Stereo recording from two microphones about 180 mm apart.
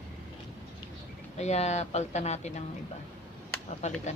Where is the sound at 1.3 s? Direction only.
40° left (ahead or behind).